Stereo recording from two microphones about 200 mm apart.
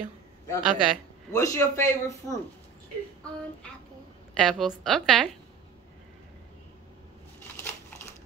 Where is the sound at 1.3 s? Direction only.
15° left (ahead or behind).